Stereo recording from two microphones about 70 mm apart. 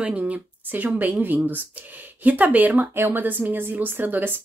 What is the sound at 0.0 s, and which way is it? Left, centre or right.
Speech, centre.